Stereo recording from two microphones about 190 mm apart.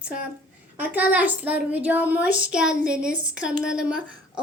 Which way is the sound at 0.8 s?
10° right (ahead or behind).